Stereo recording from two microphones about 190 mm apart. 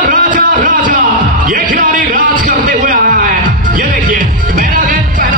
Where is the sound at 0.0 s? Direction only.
45° right (ahead or behind).